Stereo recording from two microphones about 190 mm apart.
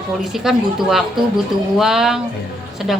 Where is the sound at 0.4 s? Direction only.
Centre (ahead or behind).